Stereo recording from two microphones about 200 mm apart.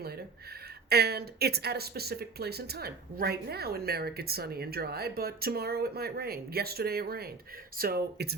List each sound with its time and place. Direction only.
0.9 s speech: 50° right (ahead or behind)